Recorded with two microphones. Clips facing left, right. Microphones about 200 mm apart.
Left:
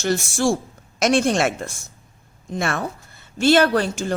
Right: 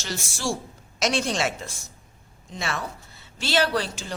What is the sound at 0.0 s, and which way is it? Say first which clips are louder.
A woman's voice: left 10 dB; 50° left (ahead or behind).